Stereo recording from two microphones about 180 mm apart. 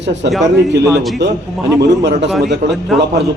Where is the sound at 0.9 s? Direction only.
Centre (ahead or behind).